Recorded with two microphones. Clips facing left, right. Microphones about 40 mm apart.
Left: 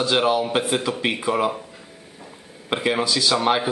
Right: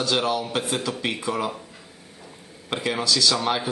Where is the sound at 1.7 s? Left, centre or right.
Centre.